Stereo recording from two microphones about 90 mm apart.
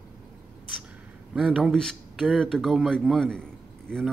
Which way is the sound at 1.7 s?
5° left (ahead or behind).